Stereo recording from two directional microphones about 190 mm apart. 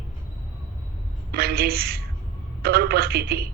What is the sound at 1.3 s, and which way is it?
Speech, 55° right (ahead or behind).